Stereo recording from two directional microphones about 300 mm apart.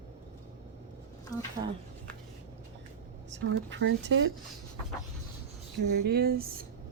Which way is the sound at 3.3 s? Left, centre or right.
Right.